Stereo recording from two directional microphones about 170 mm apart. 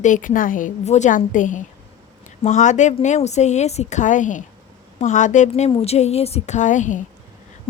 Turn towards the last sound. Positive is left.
turn(degrees=45)  # may be behind; listen again after turning